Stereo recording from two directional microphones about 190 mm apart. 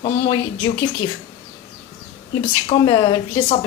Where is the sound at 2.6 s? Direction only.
25° left (ahead or behind).